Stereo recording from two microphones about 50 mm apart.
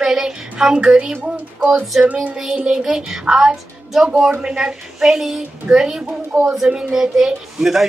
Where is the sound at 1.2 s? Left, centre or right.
Right.